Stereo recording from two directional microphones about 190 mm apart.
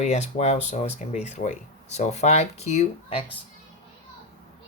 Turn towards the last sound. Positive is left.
turn(degrees=35)  # may be behind; listen again after turning